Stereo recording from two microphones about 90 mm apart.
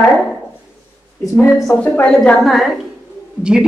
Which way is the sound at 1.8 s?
15° left (ahead or behind).